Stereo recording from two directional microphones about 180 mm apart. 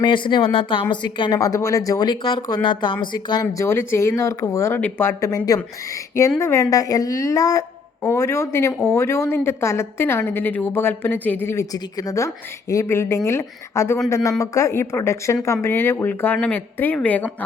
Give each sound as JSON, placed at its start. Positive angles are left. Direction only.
{"t": 0.0, "sound": "a woman's voice", "side_deg": 25}
{"t": 3.4, "sound": "a woman's voice", "side_deg": 15}